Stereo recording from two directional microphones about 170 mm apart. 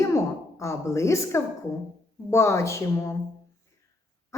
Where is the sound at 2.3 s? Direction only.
15° left (ahead or behind).